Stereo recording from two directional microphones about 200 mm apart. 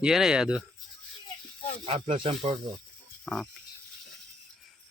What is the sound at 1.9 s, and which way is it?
Speech, 25° right (ahead or behind).